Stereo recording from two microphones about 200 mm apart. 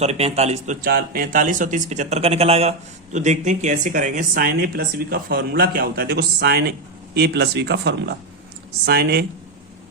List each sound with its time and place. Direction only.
0.0 s speech: 30° right (ahead or behind); by 9.2 s 55° right (ahead or behind)